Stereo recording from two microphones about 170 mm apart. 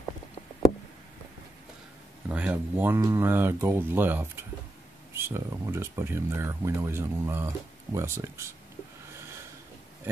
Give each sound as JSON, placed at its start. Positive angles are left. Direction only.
{"t": 2.2, "sound": "speech", "side_deg": -10}